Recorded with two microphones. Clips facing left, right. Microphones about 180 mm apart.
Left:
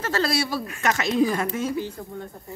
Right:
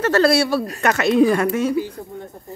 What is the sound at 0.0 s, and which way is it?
Speech, 65° right (ahead or behind).